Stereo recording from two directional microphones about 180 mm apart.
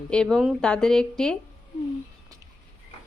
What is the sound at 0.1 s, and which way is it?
A woman's voice, 5° left (ahead or behind).